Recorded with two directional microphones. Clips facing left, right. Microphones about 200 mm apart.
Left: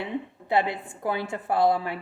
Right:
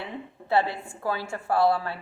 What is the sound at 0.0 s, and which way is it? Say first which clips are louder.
A woman's voice: left 5 dB; 15° left (ahead or behind).